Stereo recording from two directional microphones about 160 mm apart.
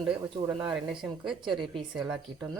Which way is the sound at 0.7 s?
5° right (ahead or behind).